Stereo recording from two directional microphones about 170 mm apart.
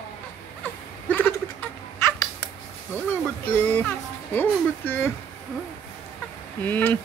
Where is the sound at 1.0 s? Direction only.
10° left (ahead or behind).